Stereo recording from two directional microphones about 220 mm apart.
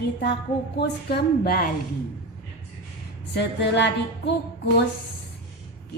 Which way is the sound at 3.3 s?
50° left (ahead or behind).